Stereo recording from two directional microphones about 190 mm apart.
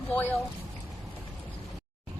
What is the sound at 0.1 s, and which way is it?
Speech, 10° left (ahead or behind).